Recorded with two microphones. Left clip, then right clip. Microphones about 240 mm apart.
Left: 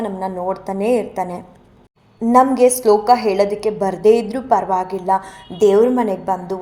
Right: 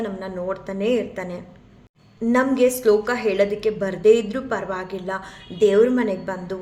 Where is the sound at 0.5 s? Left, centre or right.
Centre.